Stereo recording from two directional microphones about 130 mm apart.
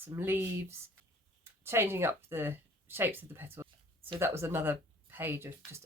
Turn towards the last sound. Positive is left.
turn(degrees=-15)  # may be behind; listen again after turning